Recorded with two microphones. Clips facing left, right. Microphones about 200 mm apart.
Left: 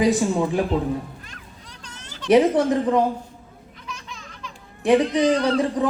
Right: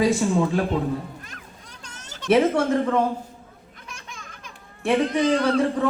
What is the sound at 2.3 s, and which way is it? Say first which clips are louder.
Speech: left 2 dB; 15° left (ahead or behind).